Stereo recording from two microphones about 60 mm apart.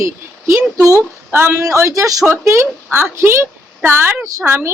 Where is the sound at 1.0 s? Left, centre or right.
Right.